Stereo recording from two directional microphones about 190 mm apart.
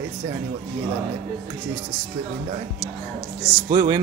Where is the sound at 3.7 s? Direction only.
25° right (ahead or behind).